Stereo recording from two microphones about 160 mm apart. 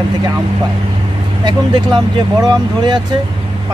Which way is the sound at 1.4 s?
30° right (ahead or behind).